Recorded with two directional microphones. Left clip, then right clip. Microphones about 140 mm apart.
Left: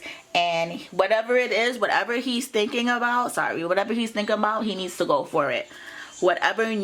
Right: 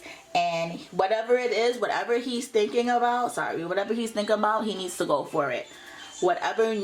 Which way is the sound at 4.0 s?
35° left (ahead or behind).